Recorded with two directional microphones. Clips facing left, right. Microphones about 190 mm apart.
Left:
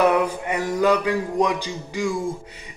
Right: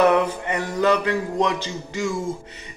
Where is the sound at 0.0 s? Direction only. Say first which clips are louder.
Right 1 dB; 10° left (ahead or behind).